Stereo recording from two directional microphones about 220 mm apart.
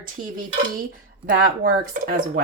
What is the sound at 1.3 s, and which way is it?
Speech, 40° right (ahead or behind).